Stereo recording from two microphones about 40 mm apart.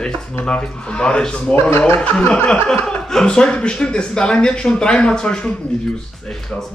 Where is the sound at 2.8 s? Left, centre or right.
Centre.